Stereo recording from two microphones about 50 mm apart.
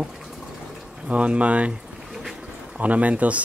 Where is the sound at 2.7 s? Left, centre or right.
Right.